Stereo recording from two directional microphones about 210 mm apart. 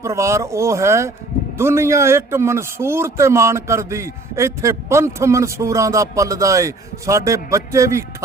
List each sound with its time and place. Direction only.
0.0 s a man's voice: 15° right (ahead or behind)